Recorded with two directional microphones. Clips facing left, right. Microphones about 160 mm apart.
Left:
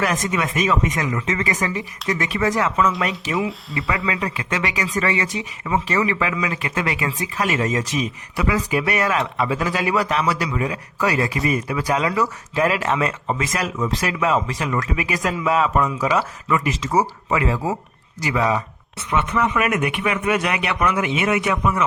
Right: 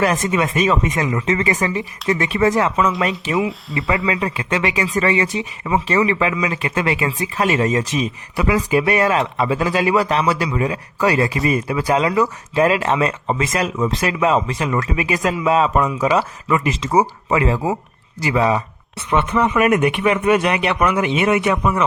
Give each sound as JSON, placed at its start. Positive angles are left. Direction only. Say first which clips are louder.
{"t": 0.0, "sound": "speech", "louder": "right 4 dB", "side_deg": -30}
{"t": 3.3, "sound": "speech", "louder": "right 3 dB", "side_deg": 0}
{"t": 3.8, "sound": "speech", "louder": "right 4 dB", "side_deg": -25}